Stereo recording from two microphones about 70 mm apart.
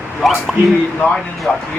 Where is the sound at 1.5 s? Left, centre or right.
Centre.